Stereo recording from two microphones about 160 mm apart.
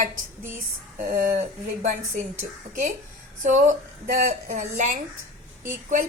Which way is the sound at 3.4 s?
50° right (ahead or behind).